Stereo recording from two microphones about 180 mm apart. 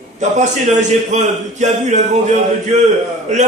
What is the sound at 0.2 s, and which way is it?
A man's voice, 40° right (ahead or behind).